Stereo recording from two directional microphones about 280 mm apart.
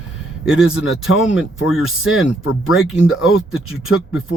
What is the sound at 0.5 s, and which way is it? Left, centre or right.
Speech, left.